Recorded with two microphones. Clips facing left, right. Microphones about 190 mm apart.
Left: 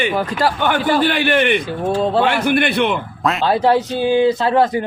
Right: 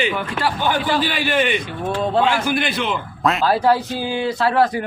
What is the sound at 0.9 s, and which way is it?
Speech, 55° left (ahead or behind).